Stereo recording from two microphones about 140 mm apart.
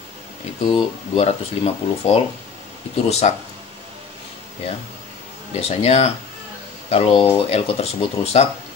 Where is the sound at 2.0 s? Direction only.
55° left (ahead or behind).